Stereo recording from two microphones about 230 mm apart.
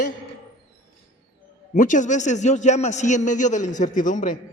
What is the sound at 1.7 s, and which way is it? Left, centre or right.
A man's voice, left.